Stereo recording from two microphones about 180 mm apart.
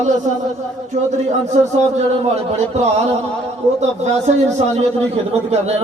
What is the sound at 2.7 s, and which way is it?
A man's voice, 40° right (ahead or behind).